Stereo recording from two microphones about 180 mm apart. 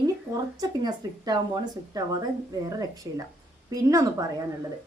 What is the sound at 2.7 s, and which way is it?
A woman's voice, 20° right (ahead or behind).